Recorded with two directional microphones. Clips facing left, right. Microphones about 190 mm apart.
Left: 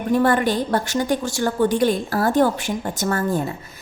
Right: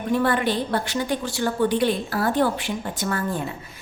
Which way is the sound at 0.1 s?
45° left (ahead or behind).